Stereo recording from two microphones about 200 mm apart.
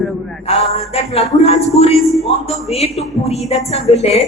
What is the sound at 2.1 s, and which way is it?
Speech, centre (ahead or behind).